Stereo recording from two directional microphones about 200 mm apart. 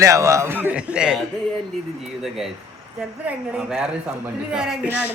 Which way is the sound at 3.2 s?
5° right (ahead or behind).